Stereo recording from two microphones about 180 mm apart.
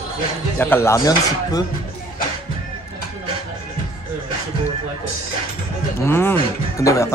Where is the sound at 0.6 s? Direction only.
15° left (ahead or behind).